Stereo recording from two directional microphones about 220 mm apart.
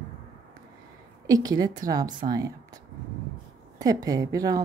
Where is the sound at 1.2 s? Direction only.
15° right (ahead or behind).